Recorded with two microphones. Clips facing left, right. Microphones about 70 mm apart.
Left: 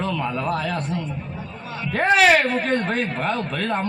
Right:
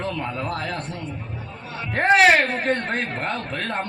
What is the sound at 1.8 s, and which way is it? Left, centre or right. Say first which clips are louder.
Speech: right 1 dB; right.